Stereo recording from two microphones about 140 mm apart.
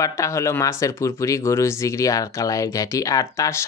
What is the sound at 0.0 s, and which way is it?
Speech, 20° left (ahead or behind).